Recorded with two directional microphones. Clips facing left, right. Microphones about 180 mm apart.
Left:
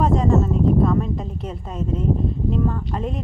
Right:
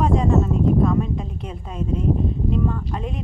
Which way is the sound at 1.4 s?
Centre (ahead or behind).